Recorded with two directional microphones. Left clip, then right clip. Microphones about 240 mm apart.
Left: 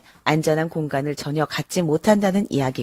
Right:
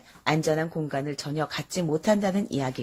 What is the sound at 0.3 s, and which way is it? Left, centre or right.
Speech, left.